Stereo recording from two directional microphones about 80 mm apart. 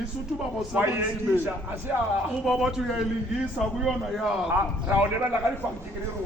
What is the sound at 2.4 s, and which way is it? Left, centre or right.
A man's voice, centre.